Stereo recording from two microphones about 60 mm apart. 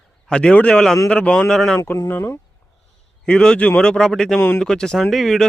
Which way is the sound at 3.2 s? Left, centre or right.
Centre.